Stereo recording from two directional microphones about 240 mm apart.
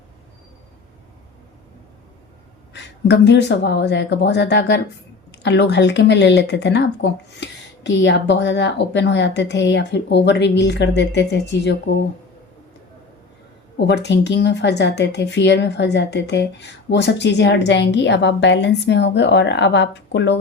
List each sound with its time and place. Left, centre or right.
2.7 s a woman's voice: left
13.7 s a woman's voice: left